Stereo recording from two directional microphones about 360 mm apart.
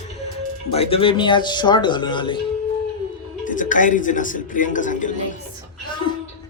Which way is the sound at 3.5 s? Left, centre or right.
Left.